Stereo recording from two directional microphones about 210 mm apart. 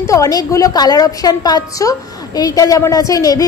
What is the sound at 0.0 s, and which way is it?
A woman's voice, 15° left (ahead or behind).